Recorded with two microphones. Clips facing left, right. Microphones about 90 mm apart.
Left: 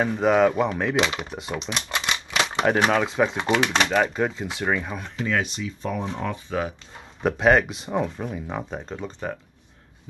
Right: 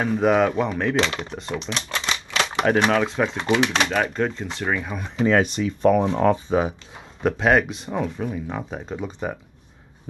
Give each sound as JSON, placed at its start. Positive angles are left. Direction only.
{"t": 0.0, "sound": "speech", "side_deg": 0}
{"t": 5.2, "sound": "speech", "side_deg": -40}
{"t": 6.3, "sound": "speech", "side_deg": -20}
{"t": 7.2, "sound": "speech", "side_deg": 0}